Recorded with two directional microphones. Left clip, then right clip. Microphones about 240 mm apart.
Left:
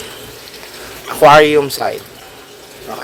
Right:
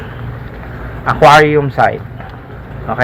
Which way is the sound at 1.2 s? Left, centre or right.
Left.